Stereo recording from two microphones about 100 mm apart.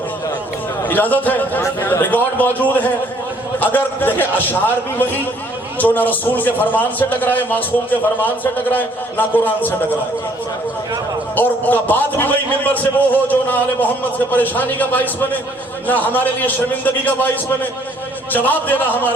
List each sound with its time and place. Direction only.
0.9 s a man's voice: 15° left (ahead or behind)
11.3 s a man's voice: 20° left (ahead or behind)